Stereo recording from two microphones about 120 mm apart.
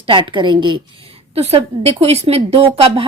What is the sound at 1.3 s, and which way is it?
A woman's voice, 60° right (ahead or behind).